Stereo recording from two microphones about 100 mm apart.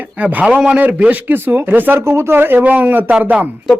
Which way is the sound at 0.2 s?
15° right (ahead or behind).